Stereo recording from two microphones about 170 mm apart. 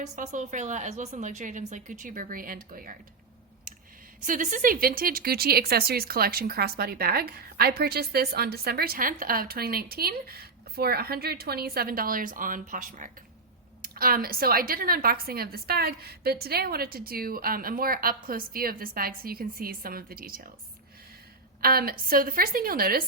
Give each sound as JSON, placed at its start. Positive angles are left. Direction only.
{"t": 0.0, "sound": "a woman's voice", "side_deg": -45}
{"t": 4.2, "sound": "speech", "side_deg": -50}
{"t": 21.6, "sound": "speech", "side_deg": -60}